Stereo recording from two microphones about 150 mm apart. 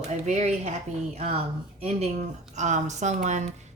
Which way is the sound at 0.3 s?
50° right (ahead or behind).